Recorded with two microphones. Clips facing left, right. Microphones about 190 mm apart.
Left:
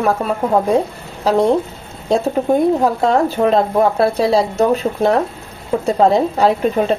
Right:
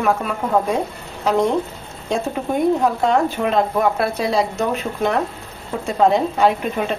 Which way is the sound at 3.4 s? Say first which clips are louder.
Left 4 dB; 35° left (ahead or behind).